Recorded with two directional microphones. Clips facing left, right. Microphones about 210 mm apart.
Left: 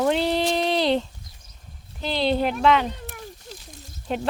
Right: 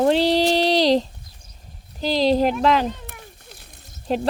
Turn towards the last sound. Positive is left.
turn(degrees=-35)  # may be behind; listen again after turning